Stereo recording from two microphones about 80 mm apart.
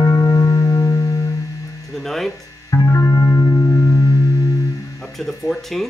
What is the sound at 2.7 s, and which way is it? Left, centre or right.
Music, left.